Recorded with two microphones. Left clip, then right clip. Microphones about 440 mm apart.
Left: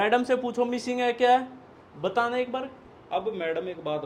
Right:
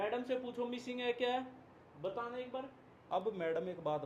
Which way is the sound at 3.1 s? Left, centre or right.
Right.